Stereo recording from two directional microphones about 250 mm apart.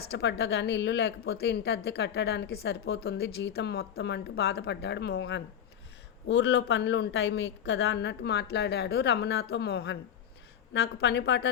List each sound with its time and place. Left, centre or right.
0.1 s a woman's voice: left